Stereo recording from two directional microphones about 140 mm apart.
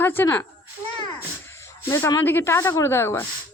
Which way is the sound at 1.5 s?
20° left (ahead or behind).